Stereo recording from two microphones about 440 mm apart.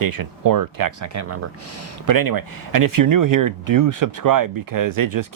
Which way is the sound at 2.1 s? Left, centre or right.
Right.